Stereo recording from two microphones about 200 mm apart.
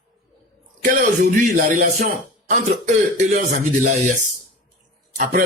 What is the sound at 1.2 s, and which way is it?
Speech, 35° right (ahead or behind).